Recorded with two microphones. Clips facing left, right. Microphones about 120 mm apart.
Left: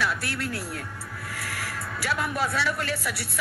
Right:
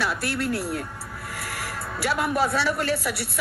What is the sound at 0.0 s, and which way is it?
A woman's voice, 35° right (ahead or behind).